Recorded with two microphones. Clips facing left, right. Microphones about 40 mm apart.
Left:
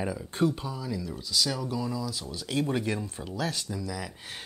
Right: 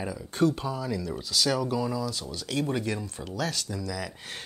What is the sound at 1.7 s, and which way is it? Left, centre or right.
Speech, right.